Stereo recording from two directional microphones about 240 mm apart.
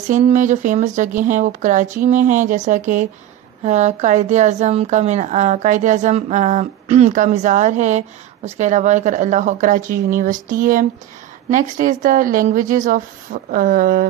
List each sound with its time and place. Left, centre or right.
0.1 s a woman's voice: right